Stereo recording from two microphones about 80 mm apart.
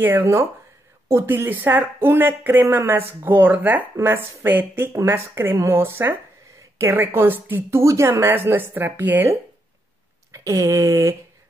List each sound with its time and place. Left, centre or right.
0.0 s speech: right
10.3 s speech: right